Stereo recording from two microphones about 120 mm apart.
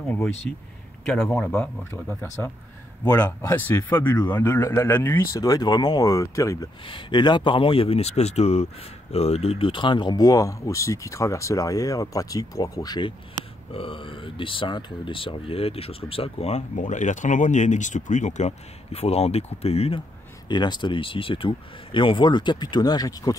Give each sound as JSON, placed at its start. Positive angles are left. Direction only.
{"t": 0.5, "sound": "speech", "side_deg": 15}
{"t": 3.1, "sound": "speech", "side_deg": 30}
{"t": 3.4, "sound": "speech", "side_deg": 20}
{"t": 6.9, "sound": "speech", "side_deg": 40}
{"t": 13.7, "sound": "speech", "side_deg": 50}
{"t": 20.4, "sound": "speech", "side_deg": 40}